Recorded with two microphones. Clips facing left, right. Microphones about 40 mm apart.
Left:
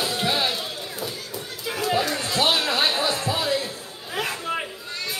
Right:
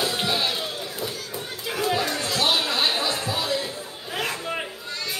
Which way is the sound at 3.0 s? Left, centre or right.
Left.